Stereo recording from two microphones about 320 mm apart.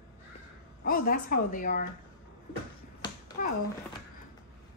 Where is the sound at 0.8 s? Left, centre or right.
Left.